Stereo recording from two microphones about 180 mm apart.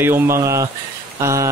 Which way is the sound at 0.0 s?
15° right (ahead or behind).